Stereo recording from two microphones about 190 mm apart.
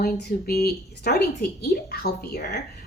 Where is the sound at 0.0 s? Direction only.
55° left (ahead or behind).